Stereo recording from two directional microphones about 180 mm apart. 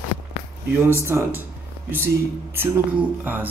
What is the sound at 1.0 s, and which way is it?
Speech, 15° right (ahead or behind).